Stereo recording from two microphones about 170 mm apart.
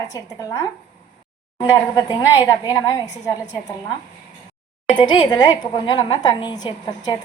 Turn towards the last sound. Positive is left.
turn(degrees=25)  # may be behind; listen again after turning